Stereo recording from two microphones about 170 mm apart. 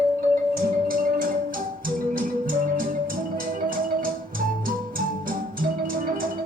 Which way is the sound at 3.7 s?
55° right (ahead or behind).